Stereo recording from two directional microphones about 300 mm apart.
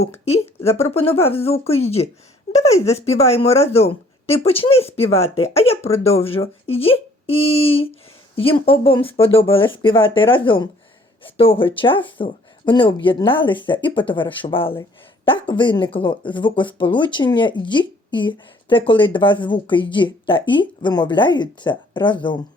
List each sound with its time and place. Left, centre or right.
0.3 s speech: centre